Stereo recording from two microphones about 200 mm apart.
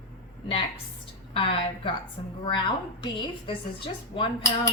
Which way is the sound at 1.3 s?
25° left (ahead or behind).